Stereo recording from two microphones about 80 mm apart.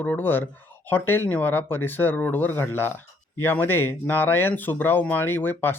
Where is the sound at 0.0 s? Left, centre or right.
Left.